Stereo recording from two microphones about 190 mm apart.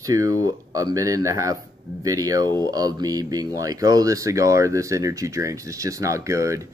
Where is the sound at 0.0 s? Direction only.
20° right (ahead or behind).